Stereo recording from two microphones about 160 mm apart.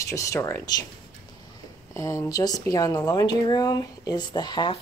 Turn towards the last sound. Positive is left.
turn(degrees=30)  # may be behind; listen again after turning